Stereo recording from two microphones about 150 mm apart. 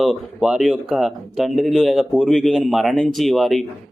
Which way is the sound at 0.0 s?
Centre (ahead or behind).